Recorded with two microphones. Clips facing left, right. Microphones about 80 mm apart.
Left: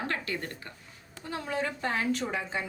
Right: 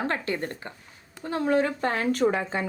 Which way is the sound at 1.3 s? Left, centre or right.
Right.